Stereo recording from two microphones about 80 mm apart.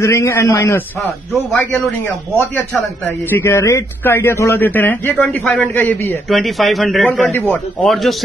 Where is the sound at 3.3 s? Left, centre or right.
Left.